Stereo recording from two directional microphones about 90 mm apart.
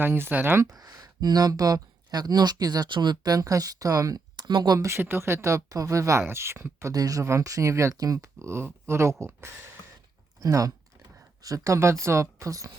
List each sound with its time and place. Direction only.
0.0 s speech: 25° right (ahead or behind)
0.7 s speech: 45° right (ahead or behind)
4.8 s speech: 30° right (ahead or behind)
10.4 s speech: 40° right (ahead or behind)